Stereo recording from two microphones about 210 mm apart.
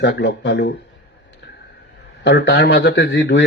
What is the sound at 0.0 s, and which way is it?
Speech, 55° left (ahead or behind).